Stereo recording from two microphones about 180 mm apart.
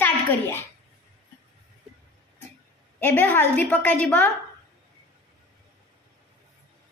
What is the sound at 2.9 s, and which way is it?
A woman's voice, 10° left (ahead or behind).